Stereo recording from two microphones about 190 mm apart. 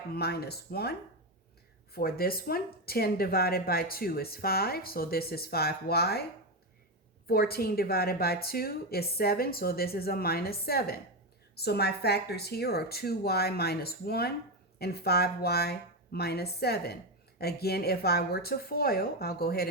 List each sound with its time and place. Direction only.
0.1 s a woman's voice: 55° left (ahead or behind)
7.3 s a woman's voice: 55° left (ahead or behind)